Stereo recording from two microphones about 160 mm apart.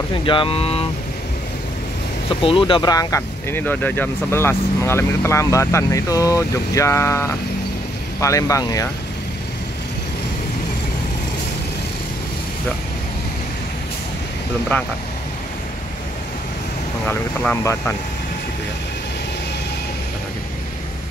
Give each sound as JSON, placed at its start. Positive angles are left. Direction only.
{"t": 0.2, "sound": "speech", "side_deg": 30}
{"t": 2.2, "sound": "speech", "side_deg": 35}
{"t": 17.1, "sound": "speech", "side_deg": 10}